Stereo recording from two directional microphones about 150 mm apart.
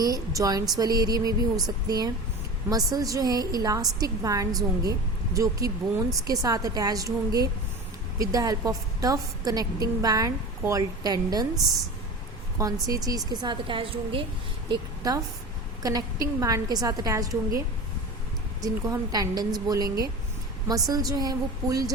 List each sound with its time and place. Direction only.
0.0 s a woman's voice: 25° right (ahead or behind)
12.5 s a woman's voice: 25° right (ahead or behind)
14.7 s a woman's voice: 25° right (ahead or behind)
18.6 s a woman's voice: 25° right (ahead or behind)